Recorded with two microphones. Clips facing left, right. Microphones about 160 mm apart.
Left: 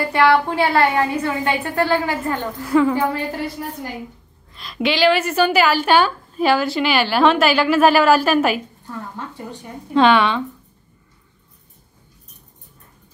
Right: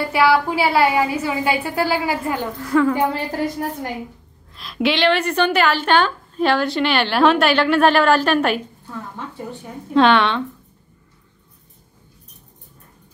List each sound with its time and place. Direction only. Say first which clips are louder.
0.0 s a woman's voice: left 1 dB; 5° right (ahead or behind)
2.6 s a woman's voice: left 1 dB; 10° left (ahead or behind)
3.6 s a woman's voice: right 4 dB; 60° right (ahead or behind)
4.6 s a woman's voice: even; centre (ahead or behind)